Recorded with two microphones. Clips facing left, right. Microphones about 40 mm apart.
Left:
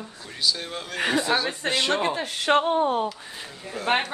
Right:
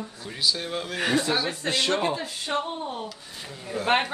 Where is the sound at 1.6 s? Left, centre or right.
Left.